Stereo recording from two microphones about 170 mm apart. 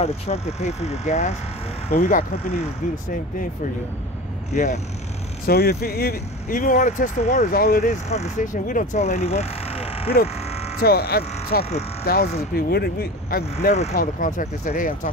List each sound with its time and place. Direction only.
0.0 s speech: 40° left (ahead or behind)
5.5 s speech: 65° left (ahead or behind)
8.1 s speech: 45° left (ahead or behind)
10.8 s speech: 65° left (ahead or behind)
13.9 s speech: 50° left (ahead or behind)